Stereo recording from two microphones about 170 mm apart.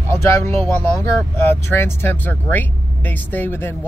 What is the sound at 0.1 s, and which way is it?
Speech, 15° left (ahead or behind).